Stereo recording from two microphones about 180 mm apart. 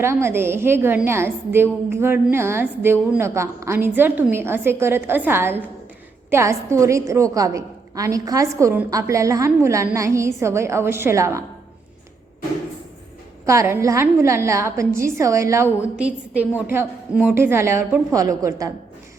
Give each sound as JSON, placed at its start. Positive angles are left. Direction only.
{"t": 0.0, "sound": "a woman's voice", "side_deg": -15}
{"t": 13.4, "sound": "a woman's voice", "side_deg": -15}